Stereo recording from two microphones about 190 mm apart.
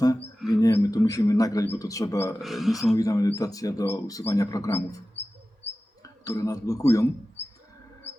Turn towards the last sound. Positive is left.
turn(degrees=15)  # may be behind; listen again after turning